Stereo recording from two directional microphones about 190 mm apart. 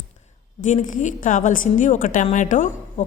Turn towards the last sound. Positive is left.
turn(degrees=40)  # may be behind; listen again after turning